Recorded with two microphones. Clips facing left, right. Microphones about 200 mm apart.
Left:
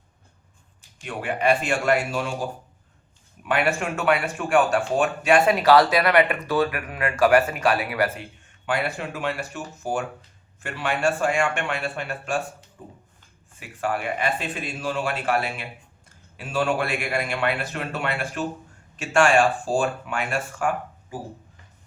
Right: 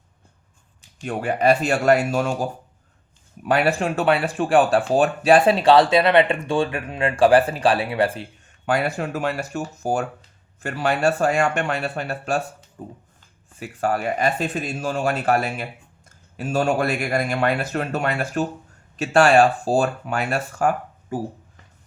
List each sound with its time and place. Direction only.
1.0 s speech: 40° right (ahead or behind)
3.4 s speech: 35° right (ahead or behind)
8.6 s speech: 40° right (ahead or behind)